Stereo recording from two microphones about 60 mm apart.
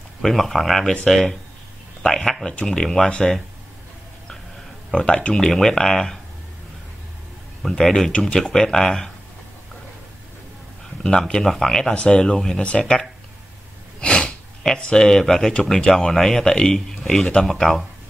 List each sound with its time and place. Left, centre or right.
0.2 s speech: centre
4.9 s speech: centre
7.6 s speech: centre
11.0 s speech: centre
14.0 s sniff: centre
15.0 s speech: centre